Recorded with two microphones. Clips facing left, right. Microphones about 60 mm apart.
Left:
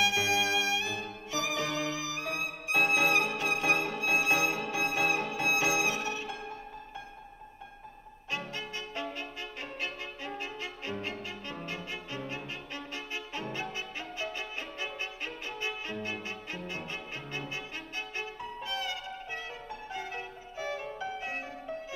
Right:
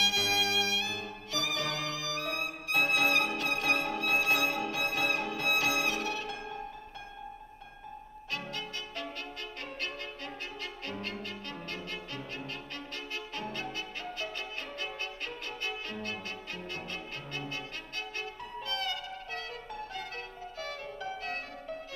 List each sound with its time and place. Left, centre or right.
0.0 s violin: left
4.0 s music: centre
8.3 s violin: centre
9.8 s music: centre
14.8 s violin: centre
18.1 s music: centre